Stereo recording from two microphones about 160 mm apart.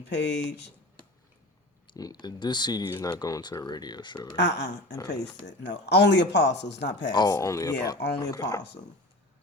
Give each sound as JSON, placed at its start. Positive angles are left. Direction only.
{"t": 0.0, "sound": "speech", "side_deg": 90}
{"t": 1.9, "sound": "speech", "side_deg": 25}
{"t": 4.4, "sound": "speech", "side_deg": 90}
{"t": 4.9, "sound": "speech", "side_deg": 25}
{"t": 5.5, "sound": "speech", "side_deg": 90}
{"t": 7.1, "sound": "speech", "side_deg": 25}